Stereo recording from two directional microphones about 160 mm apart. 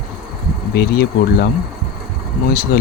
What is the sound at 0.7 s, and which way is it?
Speech, 80° left.